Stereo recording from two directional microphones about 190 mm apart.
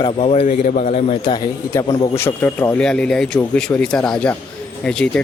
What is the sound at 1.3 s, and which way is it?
A man's voice, 20° left (ahead or behind).